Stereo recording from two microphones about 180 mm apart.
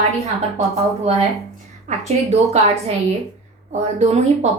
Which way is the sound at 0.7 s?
35° right (ahead or behind).